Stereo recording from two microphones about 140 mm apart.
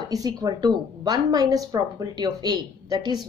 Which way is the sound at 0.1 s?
25° right (ahead or behind).